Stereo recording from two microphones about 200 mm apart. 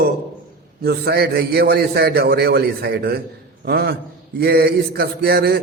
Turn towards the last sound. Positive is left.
turn(degrees=-50)  # may be behind; listen again after turning